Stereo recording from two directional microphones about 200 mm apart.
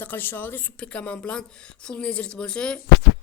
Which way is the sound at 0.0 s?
10° left (ahead or behind).